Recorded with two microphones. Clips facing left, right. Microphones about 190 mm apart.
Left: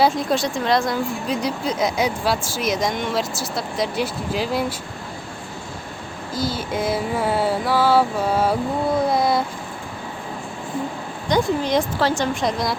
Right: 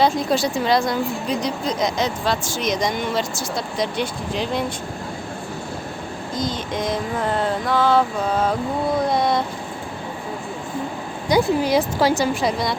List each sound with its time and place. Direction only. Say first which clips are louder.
0.0 s a woman's voice: even; centre (ahead or behind)
6.3 s a sound: left 1 dB; 5° left (ahead or behind)
9.0 s a woman's voice: left 1 dB; 5° left (ahead or behind)
11.3 s a woman's voice: right 2 dB; 10° right (ahead or behind)